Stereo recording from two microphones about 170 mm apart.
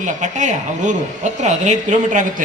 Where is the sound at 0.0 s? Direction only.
45° right (ahead or behind).